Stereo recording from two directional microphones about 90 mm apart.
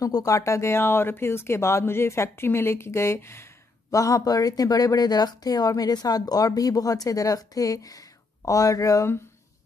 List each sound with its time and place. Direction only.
0.0 s speech: 40° left (ahead or behind)
3.9 s speech: 40° left (ahead or behind)